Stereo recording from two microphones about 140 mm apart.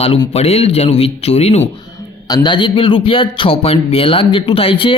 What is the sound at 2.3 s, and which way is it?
A man's voice, 35° left (ahead or behind).